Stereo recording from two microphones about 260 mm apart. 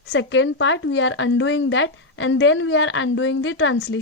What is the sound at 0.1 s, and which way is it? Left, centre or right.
A woman's voice, left.